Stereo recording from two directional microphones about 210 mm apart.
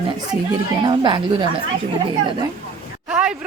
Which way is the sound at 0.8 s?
25° right (ahead or behind).